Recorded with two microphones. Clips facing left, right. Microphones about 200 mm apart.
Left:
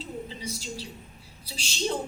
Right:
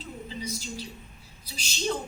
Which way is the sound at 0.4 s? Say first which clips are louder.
Even; 30° left (ahead or behind).